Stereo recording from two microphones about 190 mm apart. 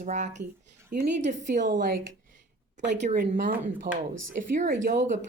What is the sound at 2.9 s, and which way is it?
Speech, 40° right (ahead or behind).